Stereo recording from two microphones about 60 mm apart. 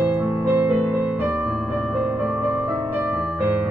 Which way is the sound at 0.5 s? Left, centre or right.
Right.